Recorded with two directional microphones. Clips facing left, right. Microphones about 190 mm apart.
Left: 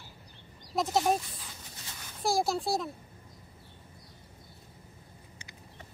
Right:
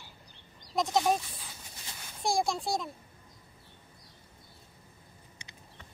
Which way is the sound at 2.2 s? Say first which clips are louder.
Left 1 dB; 5° left (ahead or behind).